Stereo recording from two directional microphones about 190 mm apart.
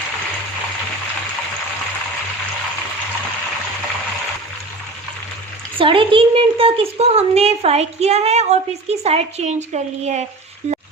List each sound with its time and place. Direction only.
5.7 s a woman's voice: 30° right (ahead or behind)